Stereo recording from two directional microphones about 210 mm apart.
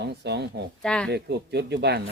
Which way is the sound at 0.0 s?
50° right (ahead or behind).